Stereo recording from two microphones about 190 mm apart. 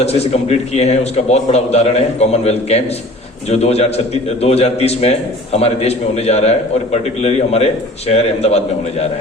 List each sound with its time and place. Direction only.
0.0 s a man's voice: 35° left (ahead or behind)